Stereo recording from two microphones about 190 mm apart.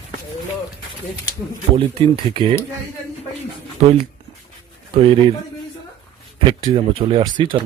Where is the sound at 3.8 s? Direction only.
35° right (ahead or behind).